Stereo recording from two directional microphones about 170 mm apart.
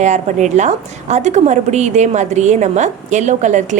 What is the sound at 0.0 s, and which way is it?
A woman's voice, 45° right (ahead or behind).